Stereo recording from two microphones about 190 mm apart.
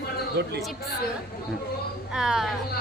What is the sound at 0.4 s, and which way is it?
Speech, 65° right (ahead or behind).